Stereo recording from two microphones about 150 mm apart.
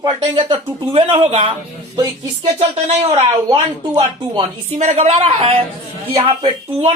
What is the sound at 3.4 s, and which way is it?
A woman's voice, 30° right (ahead or behind).